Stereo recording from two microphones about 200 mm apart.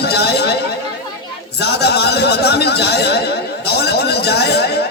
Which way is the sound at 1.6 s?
55° left (ahead or behind).